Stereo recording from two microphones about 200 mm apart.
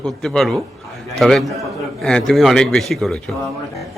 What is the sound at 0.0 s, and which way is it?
A man's voice, centre (ahead or behind).